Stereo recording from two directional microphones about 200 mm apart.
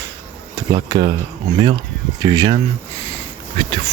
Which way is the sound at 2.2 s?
20° right (ahead or behind).